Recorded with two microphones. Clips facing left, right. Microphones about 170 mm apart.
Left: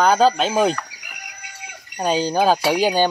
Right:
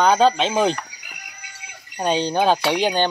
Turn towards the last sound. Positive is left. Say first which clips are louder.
# left 2 dB
turn(degrees=10)  # may be behind; listen again after turning